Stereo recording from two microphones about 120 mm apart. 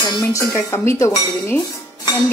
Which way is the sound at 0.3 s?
25° left (ahead or behind).